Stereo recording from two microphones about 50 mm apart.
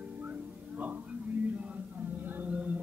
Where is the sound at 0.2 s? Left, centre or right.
Right.